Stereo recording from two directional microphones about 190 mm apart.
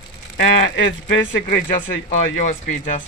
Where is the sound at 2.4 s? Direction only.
40° left (ahead or behind).